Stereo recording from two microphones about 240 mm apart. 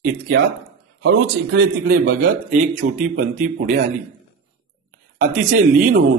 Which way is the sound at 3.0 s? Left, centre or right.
Right.